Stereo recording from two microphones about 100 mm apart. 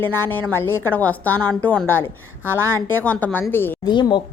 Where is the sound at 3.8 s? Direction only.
50° left (ahead or behind).